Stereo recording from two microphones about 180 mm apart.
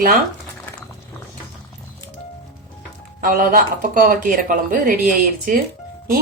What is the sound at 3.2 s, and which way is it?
Speech, 50° right (ahead or behind).